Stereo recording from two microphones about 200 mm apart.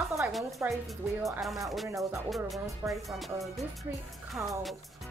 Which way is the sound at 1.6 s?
Centre (ahead or behind).